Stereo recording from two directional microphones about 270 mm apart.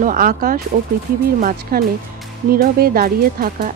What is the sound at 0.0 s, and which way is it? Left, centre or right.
Speech, right.